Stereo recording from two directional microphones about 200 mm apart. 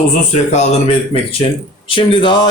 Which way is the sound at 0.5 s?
30° left (ahead or behind).